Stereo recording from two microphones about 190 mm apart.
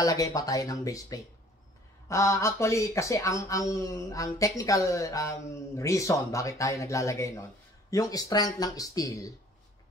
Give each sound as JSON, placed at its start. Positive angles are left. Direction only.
{"t": 0.0, "sound": "speech", "side_deg": 15}